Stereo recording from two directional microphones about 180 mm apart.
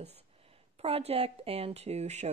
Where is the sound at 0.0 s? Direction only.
35° right (ahead or behind).